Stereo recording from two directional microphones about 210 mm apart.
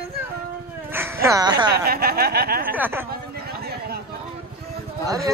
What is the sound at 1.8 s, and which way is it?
Speech, 45° right (ahead or behind).